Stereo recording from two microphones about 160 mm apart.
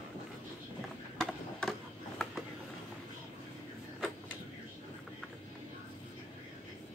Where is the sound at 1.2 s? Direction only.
Centre (ahead or behind).